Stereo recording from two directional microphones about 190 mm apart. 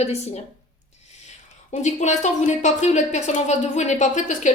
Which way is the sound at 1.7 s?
40° left (ahead or behind).